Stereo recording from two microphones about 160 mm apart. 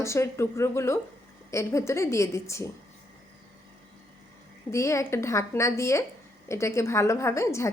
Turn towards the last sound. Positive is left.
turn(degrees=15)  # may be behind; listen again after turning